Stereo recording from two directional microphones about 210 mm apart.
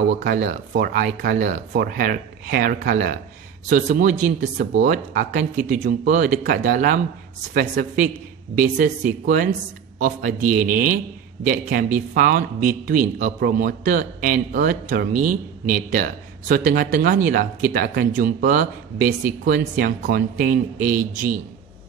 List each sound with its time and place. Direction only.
0.3 s a man's voice: 40° right (ahead or behind)